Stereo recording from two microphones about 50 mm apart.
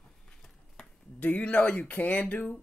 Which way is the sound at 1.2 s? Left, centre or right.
Left.